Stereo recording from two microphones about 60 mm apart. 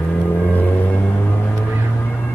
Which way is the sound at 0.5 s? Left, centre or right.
Left.